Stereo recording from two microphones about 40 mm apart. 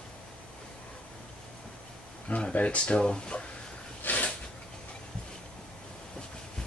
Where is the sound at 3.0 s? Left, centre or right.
Left.